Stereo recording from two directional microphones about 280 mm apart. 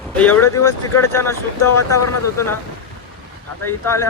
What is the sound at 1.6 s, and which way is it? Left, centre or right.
Speech, left.